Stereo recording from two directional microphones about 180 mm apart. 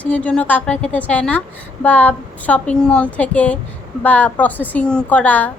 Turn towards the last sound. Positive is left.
turn(degrees=10)  # may be behind; listen again after turning